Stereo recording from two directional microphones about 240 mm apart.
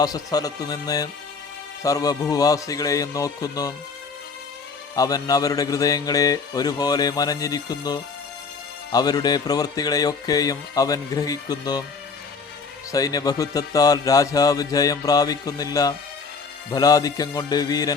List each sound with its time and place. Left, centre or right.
0.0 s a man's voice: centre
4.9 s a man's voice: centre
12.9 s a man's voice: centre